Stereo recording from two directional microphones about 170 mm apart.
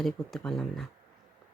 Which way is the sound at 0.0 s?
Centre (ahead or behind).